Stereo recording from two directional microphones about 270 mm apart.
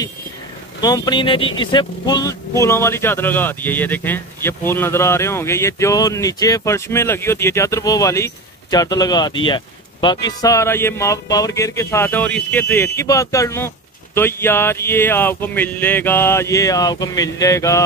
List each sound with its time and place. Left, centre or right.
0.7 s speech: centre